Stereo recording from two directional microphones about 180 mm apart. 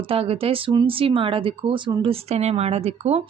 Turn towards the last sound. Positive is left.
turn(degrees=-35)  # may be behind; listen again after turning